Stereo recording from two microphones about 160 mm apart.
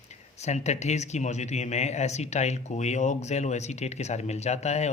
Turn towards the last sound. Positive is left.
turn(degrees=45)  # may be behind; listen again after turning